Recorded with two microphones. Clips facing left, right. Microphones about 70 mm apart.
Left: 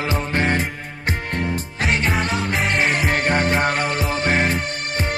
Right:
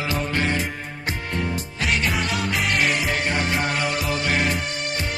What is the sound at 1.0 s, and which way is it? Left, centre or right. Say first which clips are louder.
Music: left 3 dB; left.